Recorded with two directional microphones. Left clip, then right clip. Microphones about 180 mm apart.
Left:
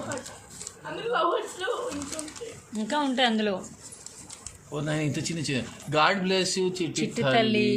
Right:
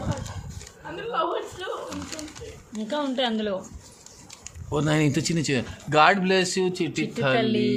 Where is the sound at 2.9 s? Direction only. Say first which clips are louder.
Left 1 dB; 10° left (ahead or behind).